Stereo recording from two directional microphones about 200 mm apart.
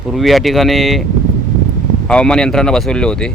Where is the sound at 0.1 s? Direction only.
Centre (ahead or behind).